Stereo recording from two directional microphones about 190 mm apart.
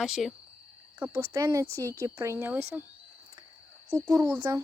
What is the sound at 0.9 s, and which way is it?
Speech, 10° right (ahead or behind).